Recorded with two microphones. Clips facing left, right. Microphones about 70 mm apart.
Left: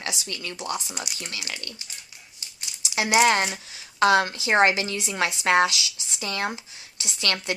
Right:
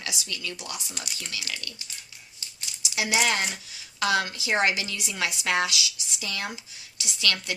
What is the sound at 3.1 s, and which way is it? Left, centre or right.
A woman's voice, left.